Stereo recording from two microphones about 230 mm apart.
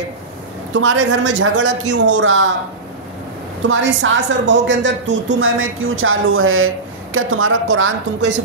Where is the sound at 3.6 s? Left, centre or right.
Right.